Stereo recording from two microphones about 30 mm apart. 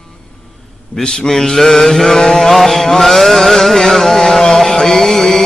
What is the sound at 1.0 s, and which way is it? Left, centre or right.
Speech, left.